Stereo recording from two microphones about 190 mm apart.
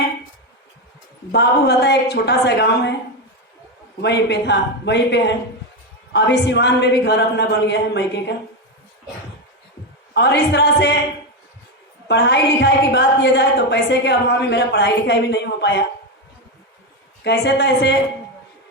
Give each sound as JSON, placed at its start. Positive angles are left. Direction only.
{"t": 1.3, "sound": "a woman's voice", "side_deg": 60}
{"t": 4.0, "sound": "a woman's voice", "side_deg": 65}
{"t": 10.2, "sound": "a woman's voice", "side_deg": 60}
{"t": 12.0, "sound": "a woman's voice", "side_deg": 65}
{"t": 17.2, "sound": "a woman's voice", "side_deg": 65}